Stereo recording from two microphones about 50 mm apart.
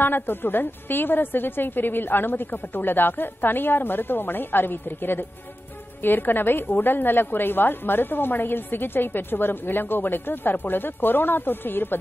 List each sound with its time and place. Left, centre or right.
0.0 s a woman's voice: left